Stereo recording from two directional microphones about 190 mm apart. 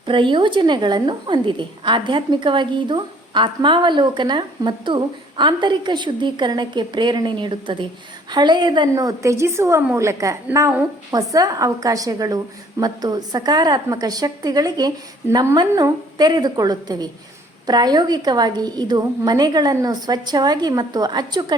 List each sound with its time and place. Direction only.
0.0 s a woman's voice: 25° right (ahead or behind)